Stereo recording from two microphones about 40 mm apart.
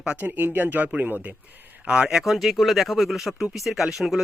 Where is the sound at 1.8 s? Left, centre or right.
Right.